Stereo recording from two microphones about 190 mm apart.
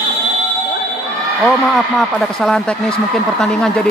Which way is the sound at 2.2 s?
Centre (ahead or behind).